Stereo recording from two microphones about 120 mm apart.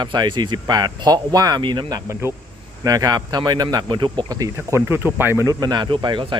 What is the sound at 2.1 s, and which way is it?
Speech, 20° right (ahead or behind).